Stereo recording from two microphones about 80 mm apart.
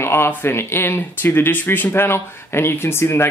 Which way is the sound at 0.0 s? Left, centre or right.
Left.